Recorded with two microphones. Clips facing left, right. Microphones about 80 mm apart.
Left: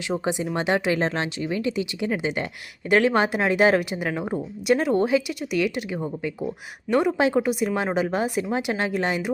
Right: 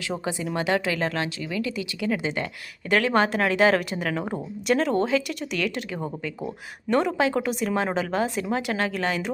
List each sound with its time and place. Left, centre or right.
0.1 s speech: centre